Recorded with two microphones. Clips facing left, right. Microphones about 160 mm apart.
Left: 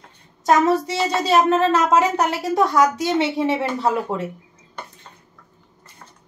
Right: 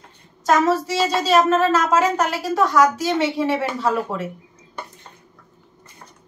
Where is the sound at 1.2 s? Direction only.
20° left (ahead or behind).